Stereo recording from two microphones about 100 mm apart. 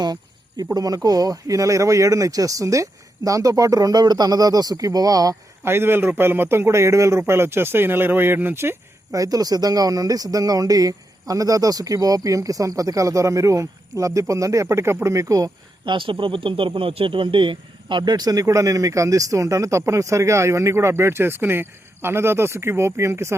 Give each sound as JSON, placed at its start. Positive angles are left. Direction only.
{"t": 0.0, "sound": "a man's voice", "side_deg": -40}
{"t": 5.6, "sound": "a man's voice", "side_deg": -25}
{"t": 15.9, "sound": "a man's voice", "side_deg": -55}